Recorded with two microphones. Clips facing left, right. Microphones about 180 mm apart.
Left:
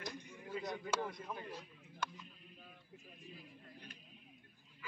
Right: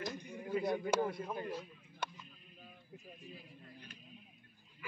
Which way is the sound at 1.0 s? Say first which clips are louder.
Right 6 dB; 20° right (ahead or behind).